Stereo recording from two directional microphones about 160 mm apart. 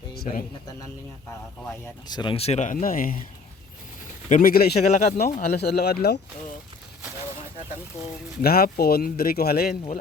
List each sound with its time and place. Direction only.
0.1 s a sound: 75° left (ahead or behind)
2.0 s speech: 30° left (ahead or behind); by 2.7 s 45° left (ahead or behind)
2.7 s speech: 60° left (ahead or behind)
4.3 s speech: 60° left (ahead or behind); by 5.2 s 80° left
5.5 s speech: 90° left
8.4 s speech: 70° left (ahead or behind)